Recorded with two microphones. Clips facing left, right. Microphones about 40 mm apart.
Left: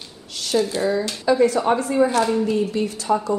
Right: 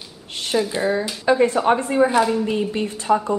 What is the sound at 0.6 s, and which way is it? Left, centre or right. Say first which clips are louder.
Speech: left 1 dB; centre.